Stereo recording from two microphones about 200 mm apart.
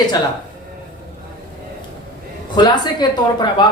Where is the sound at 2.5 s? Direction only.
20° left (ahead or behind).